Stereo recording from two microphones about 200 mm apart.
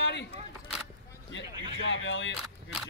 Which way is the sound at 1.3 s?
65° left (ahead or behind).